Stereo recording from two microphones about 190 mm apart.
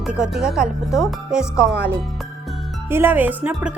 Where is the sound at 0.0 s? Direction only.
5° right (ahead or behind).